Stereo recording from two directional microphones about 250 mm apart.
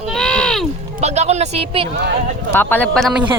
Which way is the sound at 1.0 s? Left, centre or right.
Right.